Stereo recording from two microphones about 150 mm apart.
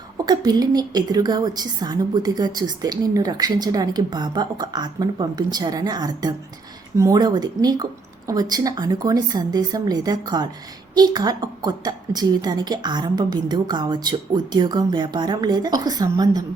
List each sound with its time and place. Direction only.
0.3 s a woman's voice: 25° right (ahead or behind)